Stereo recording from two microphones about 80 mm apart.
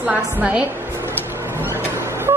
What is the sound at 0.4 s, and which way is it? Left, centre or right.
Speech, centre.